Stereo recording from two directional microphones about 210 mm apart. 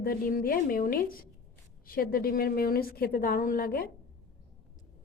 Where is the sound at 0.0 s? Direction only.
45° left (ahead or behind).